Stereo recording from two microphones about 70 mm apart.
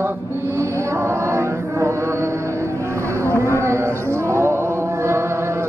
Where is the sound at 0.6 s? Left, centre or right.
Right.